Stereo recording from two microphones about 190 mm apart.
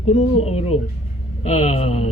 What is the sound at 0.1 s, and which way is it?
Speech, 35° left (ahead or behind).